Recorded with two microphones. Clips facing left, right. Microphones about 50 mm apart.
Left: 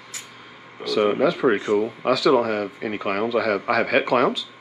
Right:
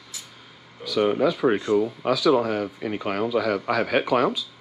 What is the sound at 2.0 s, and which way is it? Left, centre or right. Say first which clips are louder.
Speech: left 2 dB; left.